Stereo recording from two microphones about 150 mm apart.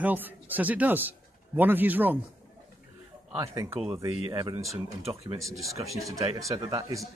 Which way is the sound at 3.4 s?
20° right (ahead or behind).